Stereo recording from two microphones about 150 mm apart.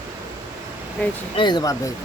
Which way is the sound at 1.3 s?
30° left (ahead or behind).